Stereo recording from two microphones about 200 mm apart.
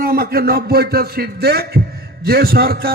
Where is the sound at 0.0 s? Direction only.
50° right (ahead or behind).